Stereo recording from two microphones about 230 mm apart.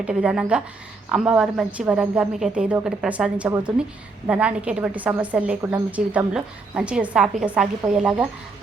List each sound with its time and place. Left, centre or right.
0.0 s a woman's voice: centre